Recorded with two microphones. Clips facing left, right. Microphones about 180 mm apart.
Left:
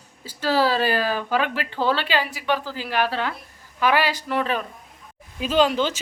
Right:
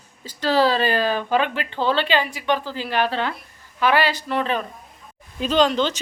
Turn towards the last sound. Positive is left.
turn(degrees=10)  # may be behind; listen again after turning